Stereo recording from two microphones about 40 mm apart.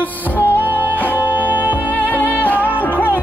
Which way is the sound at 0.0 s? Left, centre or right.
Left.